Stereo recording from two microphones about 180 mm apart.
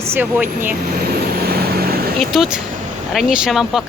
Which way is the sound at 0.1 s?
10° right (ahead or behind).